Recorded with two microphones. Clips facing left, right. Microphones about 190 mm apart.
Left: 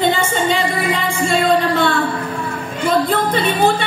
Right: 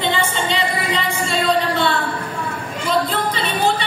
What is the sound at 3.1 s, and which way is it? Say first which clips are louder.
Music: left 5 dB; 50° left (ahead or behind).